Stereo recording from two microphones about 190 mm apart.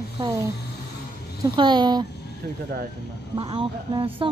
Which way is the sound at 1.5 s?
25° right (ahead or behind).